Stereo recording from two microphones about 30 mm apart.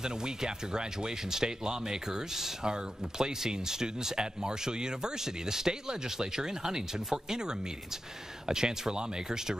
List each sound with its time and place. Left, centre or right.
0.0 s speech: right